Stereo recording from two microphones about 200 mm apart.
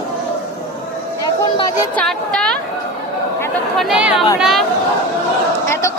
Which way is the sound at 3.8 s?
5° right (ahead or behind).